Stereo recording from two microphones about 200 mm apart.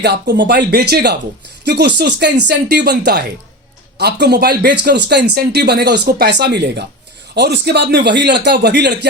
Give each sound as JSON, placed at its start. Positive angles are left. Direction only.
{"t": 0.0, "sound": "speech", "side_deg": -55}